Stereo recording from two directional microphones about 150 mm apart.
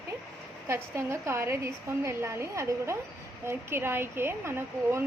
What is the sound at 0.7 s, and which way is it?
A woman's voice, 20° right (ahead or behind).